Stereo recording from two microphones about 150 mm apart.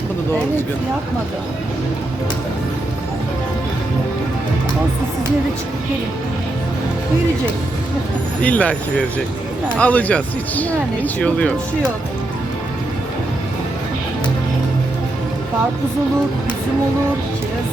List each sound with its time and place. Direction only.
8.4 s speech: 10° left (ahead or behind)